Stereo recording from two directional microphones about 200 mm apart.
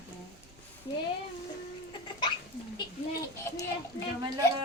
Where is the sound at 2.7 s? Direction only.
15° left (ahead or behind).